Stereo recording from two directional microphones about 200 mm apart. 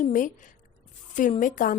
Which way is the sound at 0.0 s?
40° left (ahead or behind).